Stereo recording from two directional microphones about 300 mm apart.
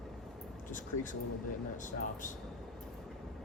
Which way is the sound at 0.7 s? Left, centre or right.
Left.